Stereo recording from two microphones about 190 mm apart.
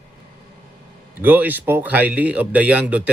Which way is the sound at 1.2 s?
10° right (ahead or behind).